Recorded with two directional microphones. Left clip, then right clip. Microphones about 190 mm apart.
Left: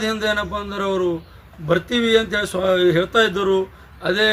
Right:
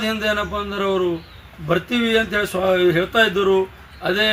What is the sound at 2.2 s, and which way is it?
A man's voice, 25° left (ahead or behind).